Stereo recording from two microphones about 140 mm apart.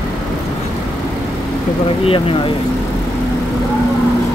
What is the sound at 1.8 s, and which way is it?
Vehicle, 40° left (ahead or behind).